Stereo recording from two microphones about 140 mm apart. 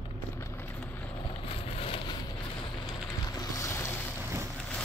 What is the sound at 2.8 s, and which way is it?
Boat, 30° left (ahead or behind).